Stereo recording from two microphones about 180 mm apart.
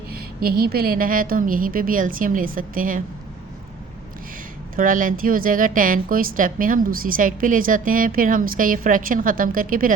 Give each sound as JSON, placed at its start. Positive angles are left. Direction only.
{"t": 0.1, "sound": "a woman's voice", "side_deg": -55}
{"t": 4.8, "sound": "a woman's voice", "side_deg": -50}